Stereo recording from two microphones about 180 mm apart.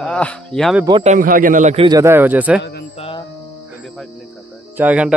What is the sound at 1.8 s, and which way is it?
Speech, 20° right (ahead or behind).